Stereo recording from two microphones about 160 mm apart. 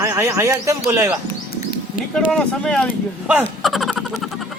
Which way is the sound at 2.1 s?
5° left (ahead or behind).